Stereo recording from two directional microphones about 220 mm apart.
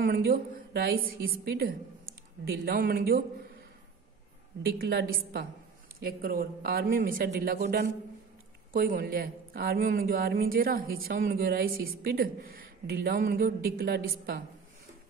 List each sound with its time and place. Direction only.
0.0 s speech: 45° right (ahead or behind)
4.6 s a man's voice: 45° right (ahead or behind)